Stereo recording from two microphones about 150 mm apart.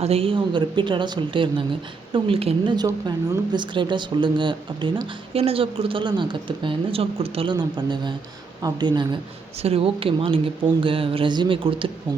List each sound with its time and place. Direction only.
0.0 s a woman's voice: 40° right (ahead or behind)
2.7 s a woman's voice: 25° right (ahead or behind); by 7.5 s 40° right (ahead or behind)
7.5 s speech: 30° right (ahead or behind)
9.6 s a woman's voice: 40° right (ahead or behind)